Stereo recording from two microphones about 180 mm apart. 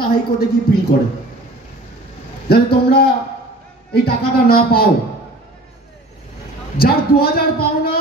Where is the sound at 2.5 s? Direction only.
60° left (ahead or behind).